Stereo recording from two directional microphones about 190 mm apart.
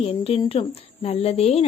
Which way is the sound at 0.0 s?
30° left (ahead or behind).